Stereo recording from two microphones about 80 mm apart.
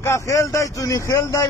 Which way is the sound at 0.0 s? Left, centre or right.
Left.